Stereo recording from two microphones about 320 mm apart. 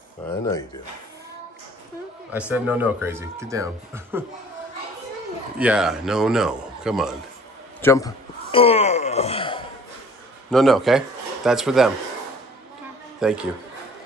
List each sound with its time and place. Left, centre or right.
2.6 s speech: centre
5.6 s a man's voice: centre
7.8 s speech: centre
10.5 s a man's voice: centre
13.2 s a man's voice: centre